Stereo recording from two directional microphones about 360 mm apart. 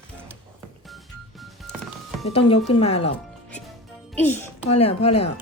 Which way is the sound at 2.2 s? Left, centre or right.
Centre.